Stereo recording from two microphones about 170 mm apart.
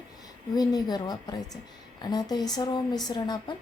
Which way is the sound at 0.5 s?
25° left (ahead or behind).